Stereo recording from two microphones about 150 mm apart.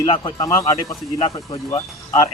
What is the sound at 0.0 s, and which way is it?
Speech, 35° left (ahead or behind).